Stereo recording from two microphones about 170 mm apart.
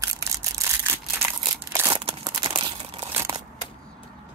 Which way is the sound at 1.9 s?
30° right (ahead or behind).